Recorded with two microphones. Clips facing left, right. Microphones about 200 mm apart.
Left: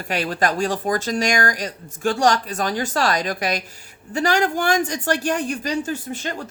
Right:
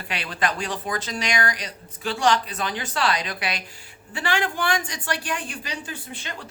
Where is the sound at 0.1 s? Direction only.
45° left (ahead or behind).